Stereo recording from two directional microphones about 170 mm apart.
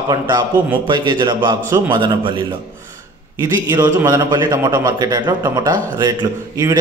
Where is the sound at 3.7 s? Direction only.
25° right (ahead or behind).